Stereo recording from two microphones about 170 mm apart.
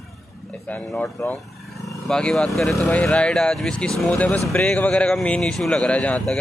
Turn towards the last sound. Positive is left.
turn(degrees=5)  # may be behind; listen again after turning